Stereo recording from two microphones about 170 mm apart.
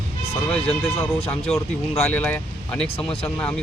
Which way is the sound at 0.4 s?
10° left (ahead or behind).